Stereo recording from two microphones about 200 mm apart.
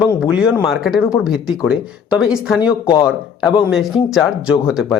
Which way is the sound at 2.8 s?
20° left (ahead or behind).